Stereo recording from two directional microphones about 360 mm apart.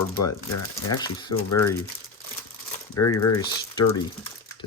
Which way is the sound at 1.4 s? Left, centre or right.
Left.